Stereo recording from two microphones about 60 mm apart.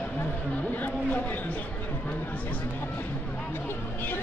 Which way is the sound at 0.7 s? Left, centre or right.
Left.